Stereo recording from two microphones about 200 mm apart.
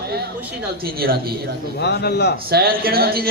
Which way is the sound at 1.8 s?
55° left (ahead or behind).